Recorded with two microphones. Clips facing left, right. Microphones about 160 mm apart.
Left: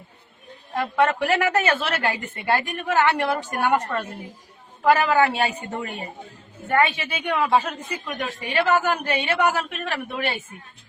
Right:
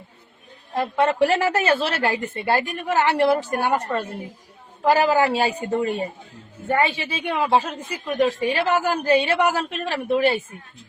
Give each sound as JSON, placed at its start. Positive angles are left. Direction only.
{"t": 0.8, "sound": "a woman's voice", "side_deg": -30}